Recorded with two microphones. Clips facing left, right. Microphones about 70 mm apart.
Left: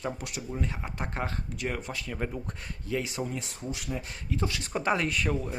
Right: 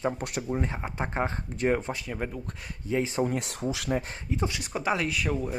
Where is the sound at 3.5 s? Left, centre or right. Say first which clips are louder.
Right 6 dB; right.